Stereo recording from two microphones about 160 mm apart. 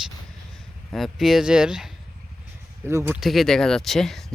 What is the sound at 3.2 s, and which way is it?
Speech, centre (ahead or behind).